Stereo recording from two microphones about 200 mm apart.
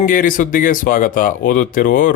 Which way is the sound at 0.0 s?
45° left (ahead or behind).